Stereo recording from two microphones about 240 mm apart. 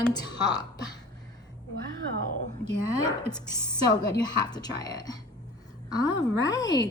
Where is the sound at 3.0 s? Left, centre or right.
Centre.